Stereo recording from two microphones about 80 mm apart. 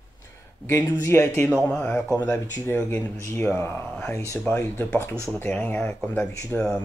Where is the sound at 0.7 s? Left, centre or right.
Left.